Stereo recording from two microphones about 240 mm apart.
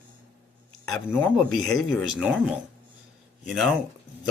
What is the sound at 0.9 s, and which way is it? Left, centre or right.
Speech, centre.